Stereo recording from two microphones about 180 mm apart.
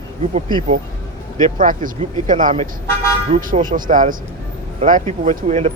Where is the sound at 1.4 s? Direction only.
45° right (ahead or behind).